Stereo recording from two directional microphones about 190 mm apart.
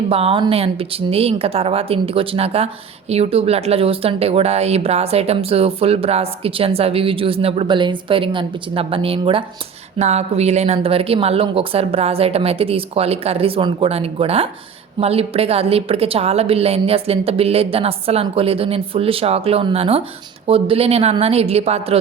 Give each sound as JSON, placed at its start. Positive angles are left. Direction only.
{"t": 0.1, "sound": "speech", "side_deg": -30}